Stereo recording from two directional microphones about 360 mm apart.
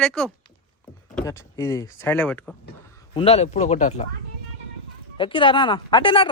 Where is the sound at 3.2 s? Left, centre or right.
Centre.